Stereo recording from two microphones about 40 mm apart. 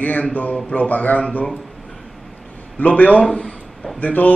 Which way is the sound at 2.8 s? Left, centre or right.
Left.